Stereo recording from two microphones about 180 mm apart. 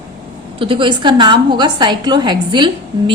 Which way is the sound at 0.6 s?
30° right (ahead or behind).